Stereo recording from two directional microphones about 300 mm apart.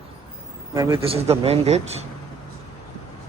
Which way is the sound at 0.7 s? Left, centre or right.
Centre.